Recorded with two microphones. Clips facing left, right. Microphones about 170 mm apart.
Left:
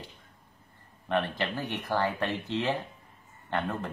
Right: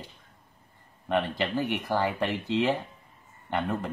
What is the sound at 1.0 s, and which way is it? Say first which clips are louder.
Speech: right 2 dB; 15° right (ahead or behind).